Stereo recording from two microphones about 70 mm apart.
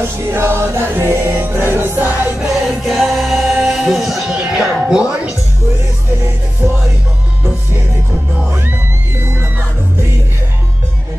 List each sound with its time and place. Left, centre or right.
0.0 s music: right
2.6 s music: centre
4.8 s speech: centre
6.6 s music: right
8.5 s music: right